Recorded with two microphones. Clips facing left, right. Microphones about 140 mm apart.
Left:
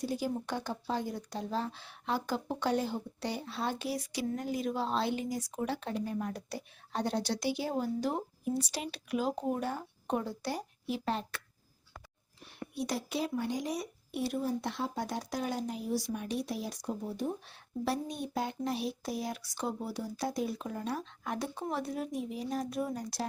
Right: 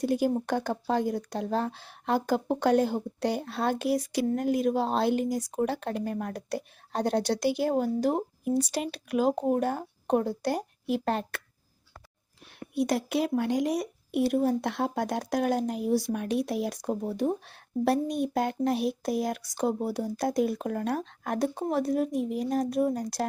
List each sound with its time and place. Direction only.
0.0 s a woman's voice: 55° right (ahead or behind)
12.7 s a woman's voice: 60° right (ahead or behind); by 23.2 s 45° right (ahead or behind)